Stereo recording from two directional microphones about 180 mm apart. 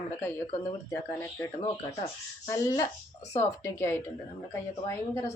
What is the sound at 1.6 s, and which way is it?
Speech, 35° left (ahead or behind).